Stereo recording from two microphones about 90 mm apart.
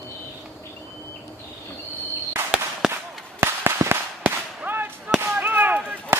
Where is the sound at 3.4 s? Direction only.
25° right (ahead or behind).